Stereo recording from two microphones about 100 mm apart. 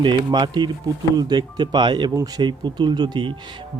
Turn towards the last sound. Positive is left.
turn(degrees=-50)  # may be behind; listen again after turning